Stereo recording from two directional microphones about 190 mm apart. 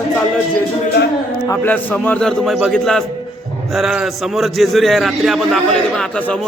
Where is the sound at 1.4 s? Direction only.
10° left (ahead or behind).